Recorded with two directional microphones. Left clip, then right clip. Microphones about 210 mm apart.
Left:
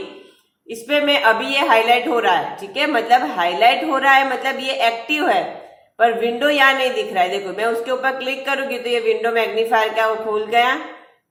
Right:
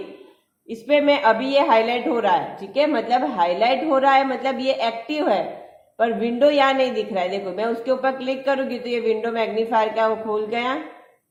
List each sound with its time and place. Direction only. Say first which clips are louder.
1.1 s a woman's voice: left 2 dB; 50° right (ahead or behind)